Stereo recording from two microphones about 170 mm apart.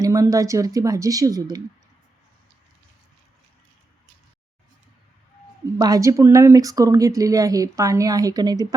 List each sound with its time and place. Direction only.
0.0 s speech: 20° right (ahead or behind)
5.8 s speech: 20° right (ahead or behind)